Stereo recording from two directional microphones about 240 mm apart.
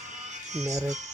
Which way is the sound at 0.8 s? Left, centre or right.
Right.